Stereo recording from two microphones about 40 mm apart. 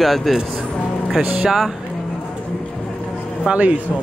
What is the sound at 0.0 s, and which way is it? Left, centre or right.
Speech, centre.